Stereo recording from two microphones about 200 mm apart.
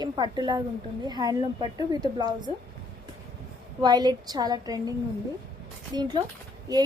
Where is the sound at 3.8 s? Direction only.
20° right (ahead or behind).